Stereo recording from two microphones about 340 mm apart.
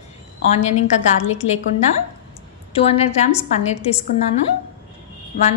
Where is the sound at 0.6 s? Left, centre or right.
Centre.